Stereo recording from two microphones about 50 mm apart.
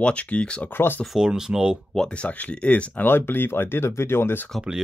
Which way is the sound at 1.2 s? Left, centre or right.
Centre.